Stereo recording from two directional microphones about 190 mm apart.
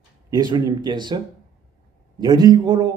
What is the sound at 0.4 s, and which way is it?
Speech, 20° right (ahead or behind).